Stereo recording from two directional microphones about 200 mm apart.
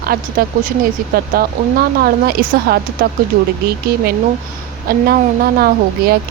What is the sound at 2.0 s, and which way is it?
Speech, 50° right (ahead or behind).